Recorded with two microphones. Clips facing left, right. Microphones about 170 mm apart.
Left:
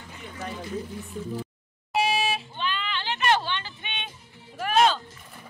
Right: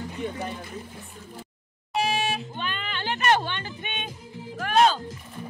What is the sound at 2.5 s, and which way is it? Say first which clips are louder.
Music: left 2 dB; 50° right (ahead or behind).